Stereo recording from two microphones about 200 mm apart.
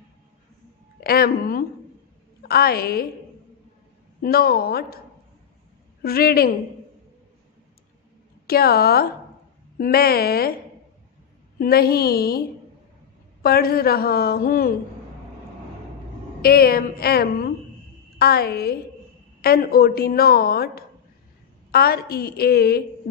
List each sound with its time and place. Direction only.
1.0 s a woman's voice: 50° left (ahead or behind)
4.2 s a woman's voice: 50° left (ahead or behind)
6.0 s a woman's voice: 50° left (ahead or behind)
8.5 s a woman's voice: 50° left (ahead or behind)
11.5 s a woman's voice: 50° left (ahead or behind)
16.3 s a woman's voice: 50° left (ahead or behind)